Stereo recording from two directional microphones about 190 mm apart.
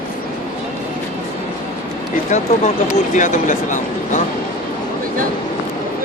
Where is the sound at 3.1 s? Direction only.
40° left (ahead or behind).